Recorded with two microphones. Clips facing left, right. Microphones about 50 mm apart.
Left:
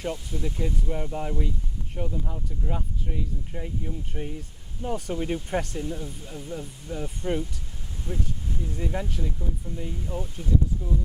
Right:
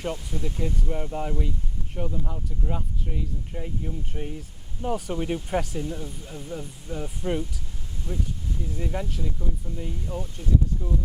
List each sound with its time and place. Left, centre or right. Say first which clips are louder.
0.5 s speech: right 1 dB; centre
8.1 s speech: even; left
8.6 s speech: even; centre
10.8 s speech: even; centre